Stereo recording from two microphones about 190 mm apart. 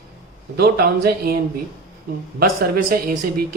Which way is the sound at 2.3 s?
50° right (ahead or behind).